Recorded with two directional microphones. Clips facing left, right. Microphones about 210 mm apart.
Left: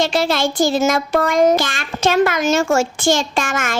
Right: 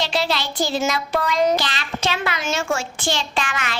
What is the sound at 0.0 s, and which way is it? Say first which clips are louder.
Speech: left 6 dB; 50° left (ahead or behind).